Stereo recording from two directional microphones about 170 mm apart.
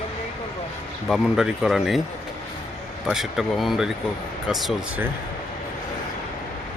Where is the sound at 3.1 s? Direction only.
Centre (ahead or behind).